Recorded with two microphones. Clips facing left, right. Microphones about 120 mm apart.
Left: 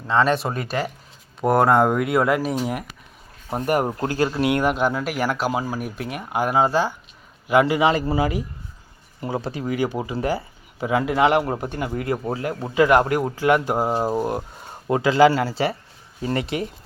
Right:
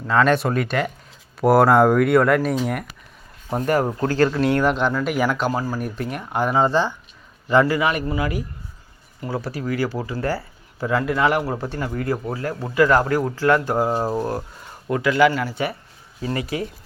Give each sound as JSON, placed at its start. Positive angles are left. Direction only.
{"t": 0.1, "sound": "speech", "side_deg": 30}
{"t": 1.4, "sound": "speech", "side_deg": -5}
{"t": 3.5, "sound": "speech", "side_deg": 15}